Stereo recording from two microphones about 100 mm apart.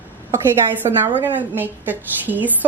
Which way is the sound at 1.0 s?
20° right (ahead or behind).